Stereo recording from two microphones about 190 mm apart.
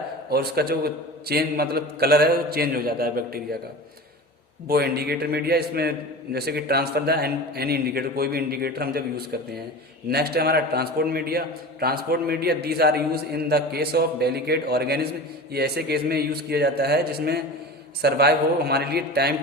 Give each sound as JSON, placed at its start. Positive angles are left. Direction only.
{"t": 0.3, "sound": "a man's voice", "side_deg": -55}
{"t": 4.7, "sound": "a man's voice", "side_deg": -55}